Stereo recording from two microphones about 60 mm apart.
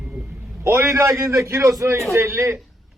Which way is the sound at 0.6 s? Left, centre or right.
Right.